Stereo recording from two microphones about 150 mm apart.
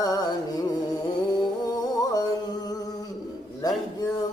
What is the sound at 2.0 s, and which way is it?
Music, 25° left (ahead or behind).